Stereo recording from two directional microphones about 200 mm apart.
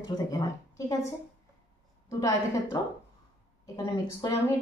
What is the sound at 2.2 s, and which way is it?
Speech, 15° left (ahead or behind).